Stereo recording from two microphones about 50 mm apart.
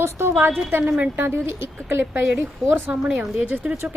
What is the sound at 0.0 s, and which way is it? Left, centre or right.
Speech, right.